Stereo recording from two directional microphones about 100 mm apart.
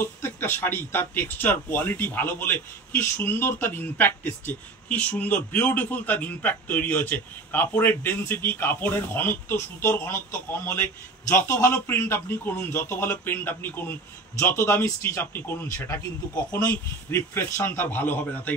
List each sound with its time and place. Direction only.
0.0 s speech: 20° left (ahead or behind)